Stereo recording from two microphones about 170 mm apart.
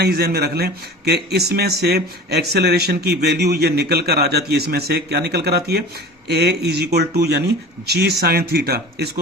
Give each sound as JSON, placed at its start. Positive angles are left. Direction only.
{"t": 0.0, "sound": "a man's voice", "side_deg": -70}